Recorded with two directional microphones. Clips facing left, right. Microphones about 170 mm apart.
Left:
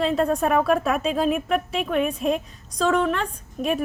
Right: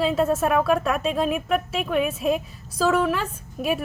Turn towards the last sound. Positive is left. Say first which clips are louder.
# even
turn(degrees=-5)  # may be behind; listen again after turning